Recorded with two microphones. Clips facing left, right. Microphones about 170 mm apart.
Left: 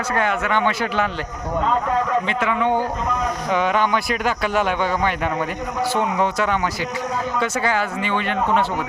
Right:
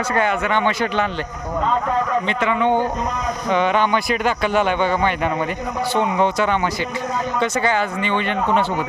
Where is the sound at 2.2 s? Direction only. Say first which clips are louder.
Right 2 dB; 5° left (ahead or behind).